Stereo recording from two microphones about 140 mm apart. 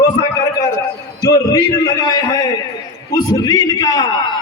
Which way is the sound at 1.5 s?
25° left (ahead or behind).